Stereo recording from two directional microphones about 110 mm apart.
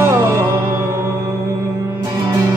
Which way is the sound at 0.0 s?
25° right (ahead or behind).